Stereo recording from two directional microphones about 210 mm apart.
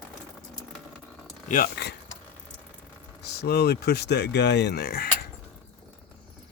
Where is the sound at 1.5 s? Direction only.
45° left (ahead or behind).